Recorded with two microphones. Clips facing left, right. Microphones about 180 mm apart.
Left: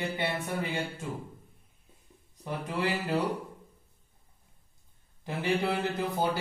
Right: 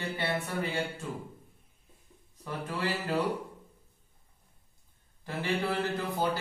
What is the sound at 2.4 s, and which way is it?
Speech, 15° left (ahead or behind).